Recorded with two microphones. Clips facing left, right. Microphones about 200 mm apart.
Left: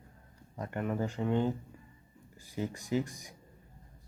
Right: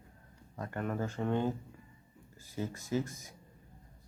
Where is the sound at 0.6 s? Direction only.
20° left (ahead or behind).